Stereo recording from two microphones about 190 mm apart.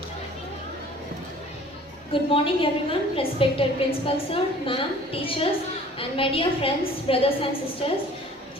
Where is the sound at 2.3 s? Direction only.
30° left (ahead or behind).